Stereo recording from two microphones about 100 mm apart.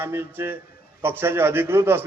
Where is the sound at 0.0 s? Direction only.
25° right (ahead or behind).